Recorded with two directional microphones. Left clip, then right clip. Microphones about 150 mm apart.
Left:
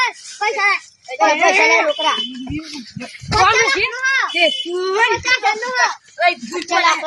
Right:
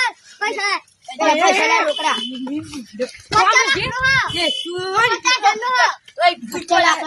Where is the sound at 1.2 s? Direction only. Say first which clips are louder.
Left 2 dB; 25° right (ahead or behind).